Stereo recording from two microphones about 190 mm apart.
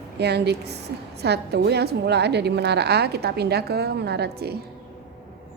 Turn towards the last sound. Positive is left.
turn(degrees=-60)  # may be behind; listen again after turning